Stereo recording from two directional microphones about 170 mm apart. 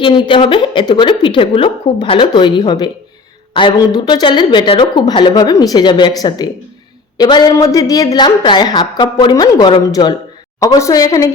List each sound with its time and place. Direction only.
0.0 s a woman's voice: 30° left (ahead or behind)